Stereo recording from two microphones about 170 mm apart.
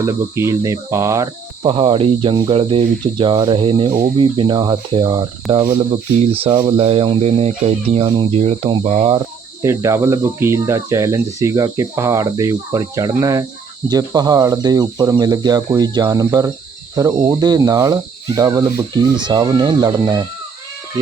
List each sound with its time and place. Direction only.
0.0 s speech: 15° right (ahead or behind)
1.6 s speech: 30° right (ahead or behind)
9.6 s speech: 15° right (ahead or behind)